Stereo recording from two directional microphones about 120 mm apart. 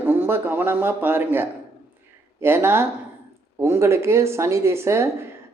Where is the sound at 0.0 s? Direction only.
15° right (ahead or behind).